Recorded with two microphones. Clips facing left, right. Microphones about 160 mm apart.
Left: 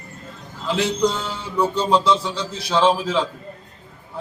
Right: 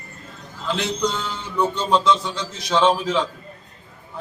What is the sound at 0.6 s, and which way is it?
A man's voice, 5° left (ahead or behind).